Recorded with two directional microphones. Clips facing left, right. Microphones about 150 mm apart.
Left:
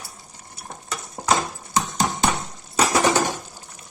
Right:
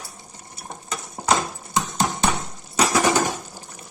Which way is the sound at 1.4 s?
Centre (ahead or behind).